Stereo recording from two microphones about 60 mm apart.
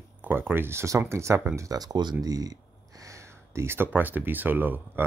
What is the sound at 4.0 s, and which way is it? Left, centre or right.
Speech, right.